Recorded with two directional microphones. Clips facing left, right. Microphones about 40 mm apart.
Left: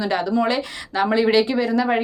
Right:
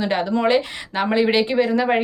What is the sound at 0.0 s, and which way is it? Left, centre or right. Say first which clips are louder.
A woman's voice: right 1 dB; right.